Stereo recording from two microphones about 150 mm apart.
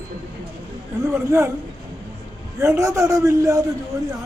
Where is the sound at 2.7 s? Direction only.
20° right (ahead or behind).